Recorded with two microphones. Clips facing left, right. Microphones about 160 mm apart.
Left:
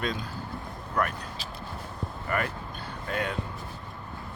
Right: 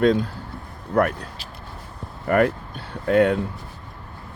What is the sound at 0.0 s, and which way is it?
Speech, 65° right (ahead or behind).